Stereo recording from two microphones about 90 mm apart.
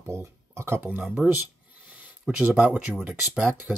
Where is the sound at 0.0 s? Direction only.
30° right (ahead or behind).